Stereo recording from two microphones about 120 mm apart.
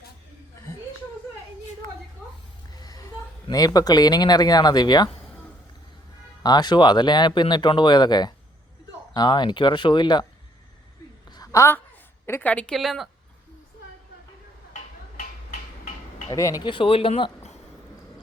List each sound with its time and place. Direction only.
2.7 s speech: 35° left (ahead or behind)
6.4 s speech: 35° left (ahead or behind)
11.3 s a sound: 35° left (ahead or behind)
12.2 s a woman's voice: 15° left (ahead or behind)
16.3 s speech: 30° left (ahead or behind)
16.6 s speech: 45° left (ahead or behind)